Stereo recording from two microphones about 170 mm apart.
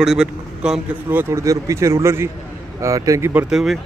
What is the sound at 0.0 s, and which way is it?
Speech, 5° right (ahead or behind).